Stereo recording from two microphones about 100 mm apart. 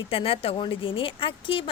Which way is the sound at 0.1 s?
65° left (ahead or behind).